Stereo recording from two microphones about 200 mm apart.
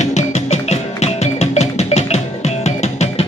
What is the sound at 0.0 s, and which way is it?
Music, 35° left (ahead or behind).